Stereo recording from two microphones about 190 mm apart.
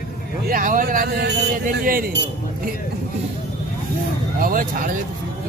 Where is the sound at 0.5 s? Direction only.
45° right (ahead or behind).